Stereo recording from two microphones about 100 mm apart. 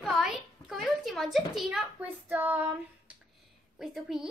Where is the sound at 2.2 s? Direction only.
20° right (ahead or behind).